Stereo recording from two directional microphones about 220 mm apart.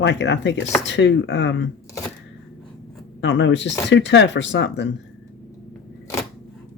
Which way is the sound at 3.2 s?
55° left (ahead or behind).